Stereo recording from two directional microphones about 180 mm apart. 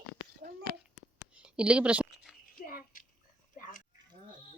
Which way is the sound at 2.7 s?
50° left (ahead or behind).